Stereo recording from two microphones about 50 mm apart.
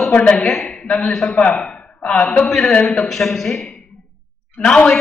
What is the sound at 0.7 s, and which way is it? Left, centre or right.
Speech, left.